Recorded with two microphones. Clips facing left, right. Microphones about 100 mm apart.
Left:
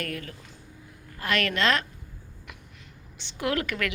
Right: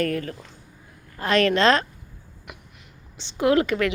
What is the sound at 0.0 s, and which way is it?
A woman's voice, 40° right (ahead or behind).